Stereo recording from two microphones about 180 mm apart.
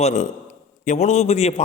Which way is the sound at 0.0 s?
45° left (ahead or behind).